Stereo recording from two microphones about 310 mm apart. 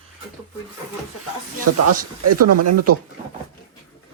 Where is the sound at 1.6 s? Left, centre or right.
Right.